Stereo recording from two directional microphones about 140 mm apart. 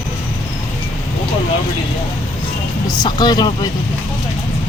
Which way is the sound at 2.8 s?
30° left (ahead or behind).